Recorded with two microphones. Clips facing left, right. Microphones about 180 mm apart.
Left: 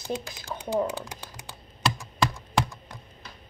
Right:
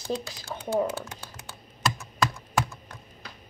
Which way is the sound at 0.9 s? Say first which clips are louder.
Even; 15° left (ahead or behind).